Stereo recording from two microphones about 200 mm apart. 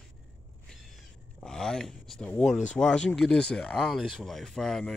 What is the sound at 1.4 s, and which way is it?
Speech, 5° left (ahead or behind).